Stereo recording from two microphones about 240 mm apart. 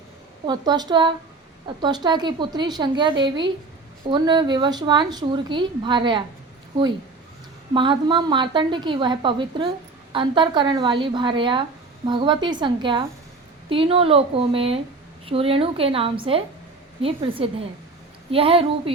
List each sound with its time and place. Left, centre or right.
0.4 s a woman's voice: centre
7.7 s a woman's voice: right